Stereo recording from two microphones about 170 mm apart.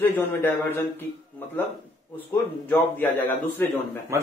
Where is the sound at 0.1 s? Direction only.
15° left (ahead or behind).